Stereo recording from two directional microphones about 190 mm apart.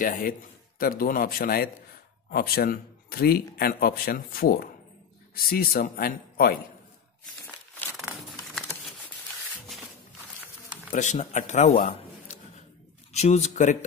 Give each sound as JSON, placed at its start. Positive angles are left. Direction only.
{"t": 0.0, "sound": "a man's voice", "side_deg": 45}
{"t": 8.5, "sound": "a sound", "side_deg": 0}
{"t": 10.9, "sound": "a man's voice", "side_deg": 40}